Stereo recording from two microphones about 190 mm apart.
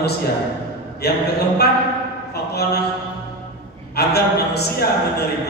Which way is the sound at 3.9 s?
60° left (ahead or behind).